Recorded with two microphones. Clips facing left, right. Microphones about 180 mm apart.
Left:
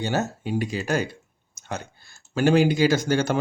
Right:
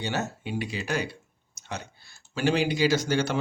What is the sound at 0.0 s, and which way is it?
Speech, 45° left (ahead or behind).